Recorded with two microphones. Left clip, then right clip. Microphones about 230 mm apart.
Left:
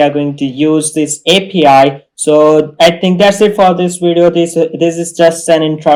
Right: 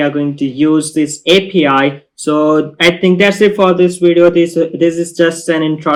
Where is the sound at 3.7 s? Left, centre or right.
Centre.